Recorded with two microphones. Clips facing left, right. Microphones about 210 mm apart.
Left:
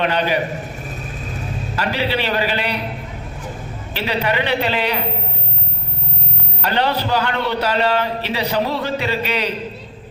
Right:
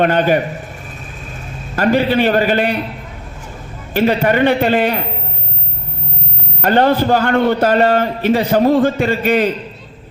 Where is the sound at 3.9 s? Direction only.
50° right (ahead or behind).